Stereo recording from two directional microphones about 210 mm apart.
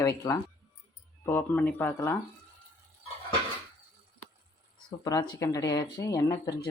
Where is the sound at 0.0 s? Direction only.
15° left (ahead or behind).